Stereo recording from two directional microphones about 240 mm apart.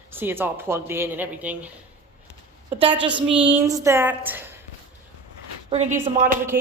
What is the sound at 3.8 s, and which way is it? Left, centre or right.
Speech, centre.